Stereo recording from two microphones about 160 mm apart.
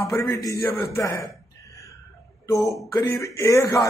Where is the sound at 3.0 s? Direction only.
20° left (ahead or behind).